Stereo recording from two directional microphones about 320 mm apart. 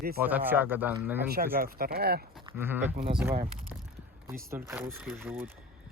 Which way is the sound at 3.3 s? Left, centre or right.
Centre.